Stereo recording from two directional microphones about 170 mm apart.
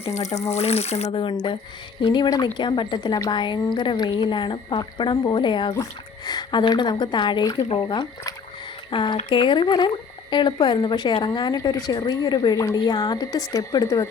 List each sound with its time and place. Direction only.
0.0 s speech: 40° left (ahead or behind); by 14.1 s 20° left (ahead or behind)